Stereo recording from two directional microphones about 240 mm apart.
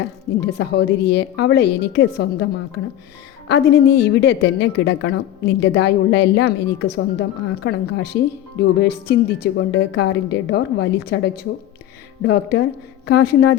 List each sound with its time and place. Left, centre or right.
0.3 s a woman's voice: left
3.5 s a woman's voice: left